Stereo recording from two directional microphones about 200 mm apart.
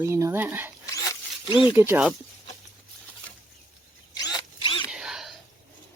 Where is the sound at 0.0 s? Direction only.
15° right (ahead or behind).